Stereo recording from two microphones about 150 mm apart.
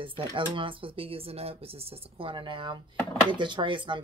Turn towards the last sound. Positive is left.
turn(degrees=-35)  # may be behind; listen again after turning